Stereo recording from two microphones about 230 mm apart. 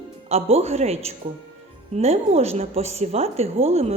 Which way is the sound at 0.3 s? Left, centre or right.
Right.